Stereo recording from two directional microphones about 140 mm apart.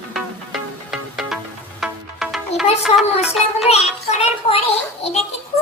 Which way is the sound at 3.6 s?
50° left (ahead or behind).